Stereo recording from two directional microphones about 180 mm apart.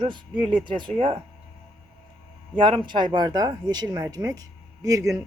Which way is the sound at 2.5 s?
25° right (ahead or behind).